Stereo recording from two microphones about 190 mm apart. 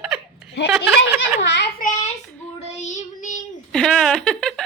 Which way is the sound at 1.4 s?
65° left (ahead or behind).